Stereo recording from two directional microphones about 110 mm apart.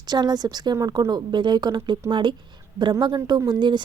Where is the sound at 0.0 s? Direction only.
40° right (ahead or behind).